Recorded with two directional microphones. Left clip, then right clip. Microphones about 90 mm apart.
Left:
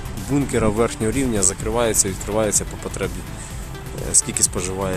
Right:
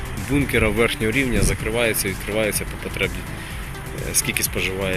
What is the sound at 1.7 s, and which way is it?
Speech, 80° left.